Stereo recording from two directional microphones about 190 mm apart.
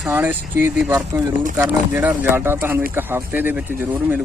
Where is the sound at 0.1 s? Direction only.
10° right (ahead or behind).